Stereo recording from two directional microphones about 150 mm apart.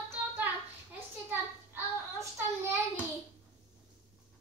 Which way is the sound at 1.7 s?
15° right (ahead or behind).